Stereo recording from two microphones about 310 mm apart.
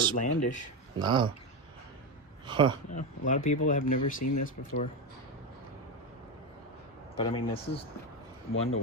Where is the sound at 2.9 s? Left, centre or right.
Left.